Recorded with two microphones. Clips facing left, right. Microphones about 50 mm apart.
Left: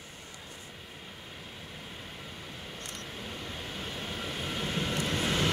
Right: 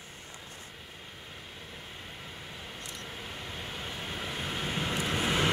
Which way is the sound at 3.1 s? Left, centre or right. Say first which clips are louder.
Left 1 dB; centre.